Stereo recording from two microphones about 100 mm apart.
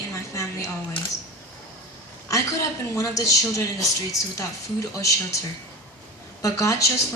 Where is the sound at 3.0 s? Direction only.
35° left (ahead or behind).